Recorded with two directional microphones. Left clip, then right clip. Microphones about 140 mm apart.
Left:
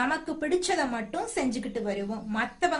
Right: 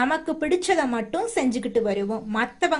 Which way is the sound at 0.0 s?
40° right (ahead or behind).